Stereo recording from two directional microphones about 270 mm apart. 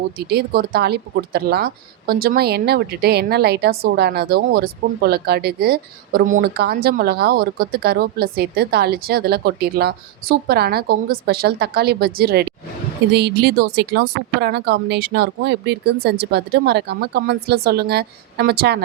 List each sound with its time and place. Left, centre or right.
0.3 s a woman's voice: right